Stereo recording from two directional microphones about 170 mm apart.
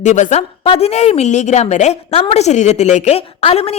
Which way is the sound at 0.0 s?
45° left (ahead or behind).